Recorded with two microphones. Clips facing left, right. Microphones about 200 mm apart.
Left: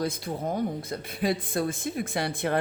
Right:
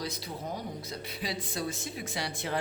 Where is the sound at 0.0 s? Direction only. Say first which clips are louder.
Left 8 dB; 50° left (ahead or behind).